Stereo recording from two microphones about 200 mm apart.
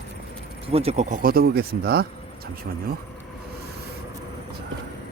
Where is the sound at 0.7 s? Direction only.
30° right (ahead or behind); by 2.1 s 50° right (ahead or behind).